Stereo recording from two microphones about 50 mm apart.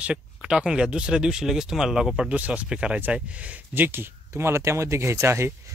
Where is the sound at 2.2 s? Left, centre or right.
Right.